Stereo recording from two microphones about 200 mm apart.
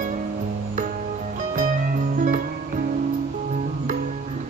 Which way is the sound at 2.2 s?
40° right (ahead or behind).